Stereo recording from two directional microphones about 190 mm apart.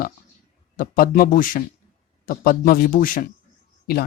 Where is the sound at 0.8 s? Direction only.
50° left (ahead or behind).